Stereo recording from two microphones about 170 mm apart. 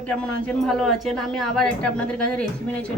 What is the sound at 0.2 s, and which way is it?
A woman's voice, 5° left (ahead or behind).